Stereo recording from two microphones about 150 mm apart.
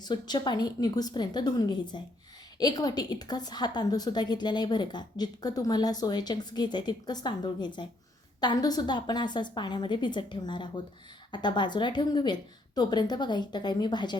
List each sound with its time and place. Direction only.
0.0 s a woman's voice: 30° left (ahead or behind)